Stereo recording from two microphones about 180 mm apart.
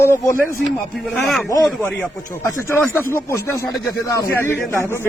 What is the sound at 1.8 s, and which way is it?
A man's voice, 10° left (ahead or behind).